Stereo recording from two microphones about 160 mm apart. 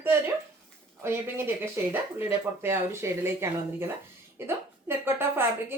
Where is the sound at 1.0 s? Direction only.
15° right (ahead or behind).